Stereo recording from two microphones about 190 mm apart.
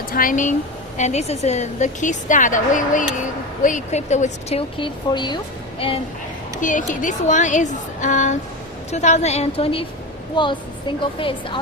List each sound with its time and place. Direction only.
0.1 s a woman's voice: 45° left (ahead or behind); by 6.0 s 30° left (ahead or behind)
6.6 s a woman's voice: 45° left (ahead or behind); by 11.6 s 25° left (ahead or behind)